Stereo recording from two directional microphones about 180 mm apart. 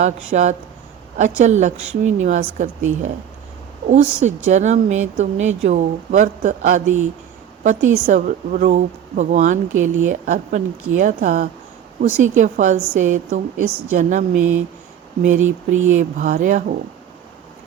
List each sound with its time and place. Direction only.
0.0 s a woman's voice: 40° right (ahead or behind)
3.8 s a woman's voice: 40° right (ahead or behind)